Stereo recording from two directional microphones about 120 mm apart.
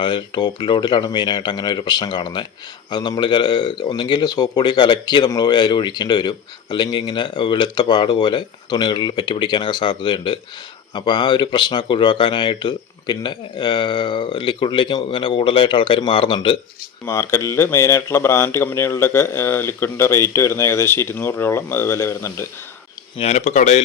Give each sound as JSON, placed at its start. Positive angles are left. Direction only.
{"t": 0.0, "sound": "speech", "side_deg": 45}
{"t": 17.1, "sound": "speech", "side_deg": 25}
{"t": 23.1, "sound": "speech", "side_deg": 65}